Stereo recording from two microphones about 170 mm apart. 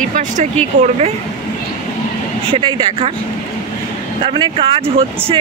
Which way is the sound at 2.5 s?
30° right (ahead or behind).